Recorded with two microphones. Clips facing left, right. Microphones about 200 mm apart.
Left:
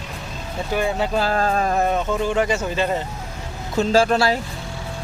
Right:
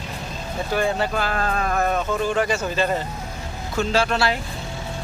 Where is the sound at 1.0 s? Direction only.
30° left (ahead or behind).